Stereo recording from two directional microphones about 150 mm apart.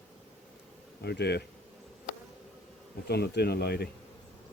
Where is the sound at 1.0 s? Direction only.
90° left.